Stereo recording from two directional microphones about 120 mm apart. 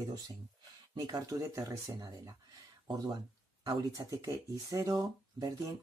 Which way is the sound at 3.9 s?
30° right (ahead or behind).